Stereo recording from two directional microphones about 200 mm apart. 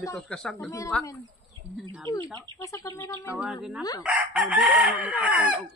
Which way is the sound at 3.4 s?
5° right (ahead or behind).